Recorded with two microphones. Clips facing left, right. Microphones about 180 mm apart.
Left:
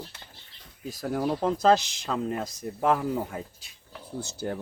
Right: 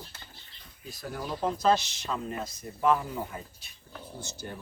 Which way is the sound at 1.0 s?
65° left (ahead or behind).